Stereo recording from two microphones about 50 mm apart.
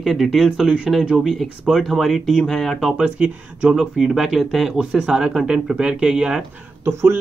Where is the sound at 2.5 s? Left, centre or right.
Centre.